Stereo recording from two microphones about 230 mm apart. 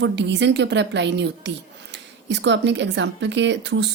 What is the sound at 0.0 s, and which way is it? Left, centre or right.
A woman's voice, right.